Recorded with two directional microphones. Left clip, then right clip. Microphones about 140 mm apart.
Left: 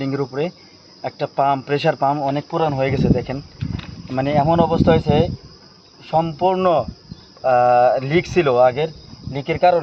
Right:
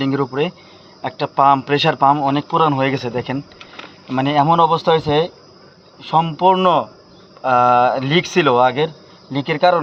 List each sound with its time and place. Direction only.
0.0 s a man's voice: 15° left (ahead or behind)